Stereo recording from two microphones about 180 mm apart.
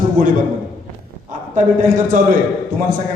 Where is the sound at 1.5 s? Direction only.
45° right (ahead or behind).